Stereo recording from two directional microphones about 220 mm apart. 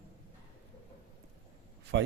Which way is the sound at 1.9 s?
55° right (ahead or behind).